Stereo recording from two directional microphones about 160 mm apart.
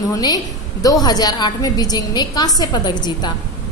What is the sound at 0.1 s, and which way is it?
A woman's voice, 25° left (ahead or behind).